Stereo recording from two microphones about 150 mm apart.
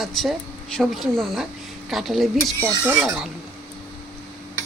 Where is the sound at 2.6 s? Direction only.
15° right (ahead or behind).